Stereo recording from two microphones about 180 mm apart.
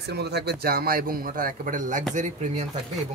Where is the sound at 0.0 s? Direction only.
65° right (ahead or behind).